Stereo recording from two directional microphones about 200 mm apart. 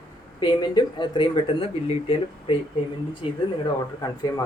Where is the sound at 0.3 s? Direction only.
20° left (ahead or behind).